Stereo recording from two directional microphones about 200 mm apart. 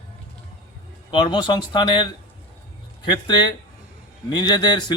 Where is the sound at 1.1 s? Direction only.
20° left (ahead or behind).